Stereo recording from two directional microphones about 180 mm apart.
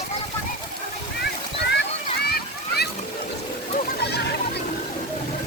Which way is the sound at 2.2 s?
60° left (ahead or behind).